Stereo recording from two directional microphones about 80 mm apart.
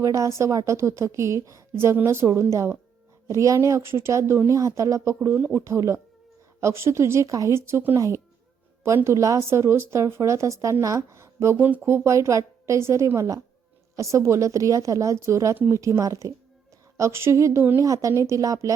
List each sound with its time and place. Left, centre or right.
0.0 s a woman's voice: right
7.9 s a woman's voice: right
11.5 s a woman's voice: right
17.7 s speech: right